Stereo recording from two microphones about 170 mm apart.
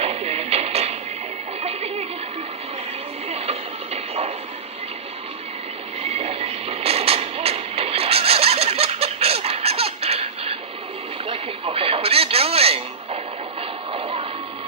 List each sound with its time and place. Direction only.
0.0 s music: 35° right (ahead or behind)
3.3 s a sound: 35° right (ahead or behind)
6.0 s vehicle: 35° right (ahead or behind)
11.2 s radio: 35° right (ahead or behind)